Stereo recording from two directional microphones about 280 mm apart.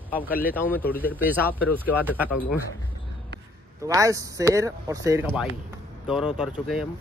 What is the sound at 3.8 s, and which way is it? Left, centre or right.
Speech, centre.